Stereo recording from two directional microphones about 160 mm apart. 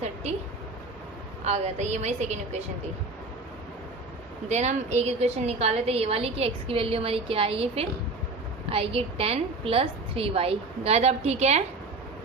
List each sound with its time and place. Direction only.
0.0 s a sound: 45° right (ahead or behind)
1.5 s a woman's voice: 45° right (ahead or behind)
4.4 s a woman's voice: 45° right (ahead or behind)